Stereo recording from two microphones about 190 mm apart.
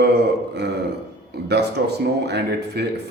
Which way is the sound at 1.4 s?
60° right (ahead or behind).